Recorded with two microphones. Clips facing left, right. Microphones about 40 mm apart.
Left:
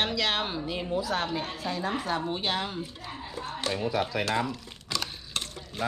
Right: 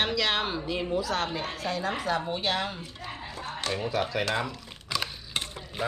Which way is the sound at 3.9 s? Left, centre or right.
Centre.